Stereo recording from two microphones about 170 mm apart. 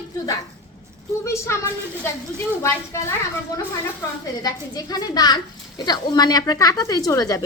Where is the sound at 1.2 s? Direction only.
15° left (ahead or behind).